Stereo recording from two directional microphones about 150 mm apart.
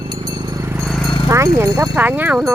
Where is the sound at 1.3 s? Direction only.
20° right (ahead or behind).